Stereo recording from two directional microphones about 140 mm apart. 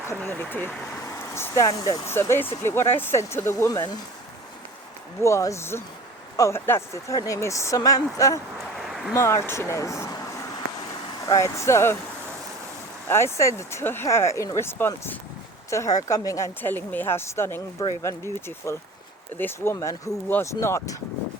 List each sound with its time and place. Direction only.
0.2 s speech: 15° left (ahead or behind)
5.2 s speech: 20° left (ahead or behind)
11.3 s speech: 20° left (ahead or behind)
13.1 s speech: 20° left (ahead or behind)